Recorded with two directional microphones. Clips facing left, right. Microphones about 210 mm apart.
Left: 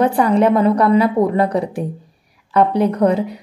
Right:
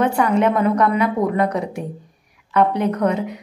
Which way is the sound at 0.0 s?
35° left (ahead or behind).